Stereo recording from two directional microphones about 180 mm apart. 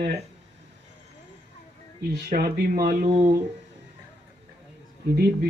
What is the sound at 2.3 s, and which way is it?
Speech, 55° right (ahead or behind).